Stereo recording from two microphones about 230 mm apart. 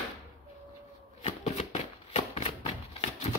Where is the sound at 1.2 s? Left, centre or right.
Left.